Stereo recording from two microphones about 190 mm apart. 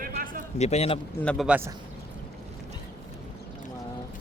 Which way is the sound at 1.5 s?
10° right (ahead or behind).